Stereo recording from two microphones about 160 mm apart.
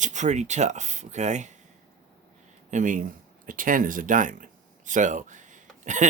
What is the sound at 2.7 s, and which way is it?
Speech, 50° right (ahead or behind).